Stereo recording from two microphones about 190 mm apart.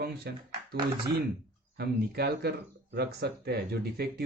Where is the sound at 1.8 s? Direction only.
60° right (ahead or behind).